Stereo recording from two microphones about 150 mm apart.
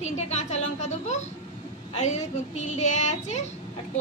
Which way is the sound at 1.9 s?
50° left (ahead or behind).